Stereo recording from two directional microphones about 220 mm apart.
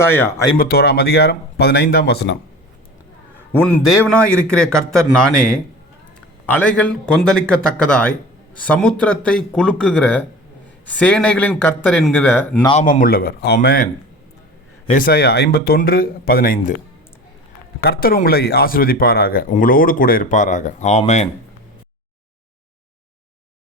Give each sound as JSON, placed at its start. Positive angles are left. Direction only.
{"t": 0.0, "sound": "speech", "side_deg": 10}
{"t": 0.5, "sound": "speech", "side_deg": 45}
{"t": 3.6, "sound": "a man's voice", "side_deg": 5}
{"t": 12.8, "sound": "speech", "side_deg": 40}
{"t": 14.8, "sound": "speech", "side_deg": 40}
{"t": 17.7, "sound": "speech", "side_deg": 45}